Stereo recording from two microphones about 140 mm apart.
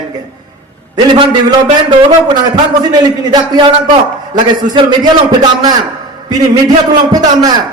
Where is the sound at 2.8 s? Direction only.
30° right (ahead or behind).